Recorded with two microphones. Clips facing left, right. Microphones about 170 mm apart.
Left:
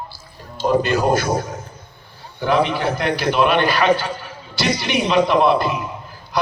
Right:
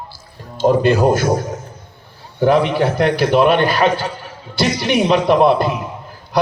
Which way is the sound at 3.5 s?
45° right (ahead or behind).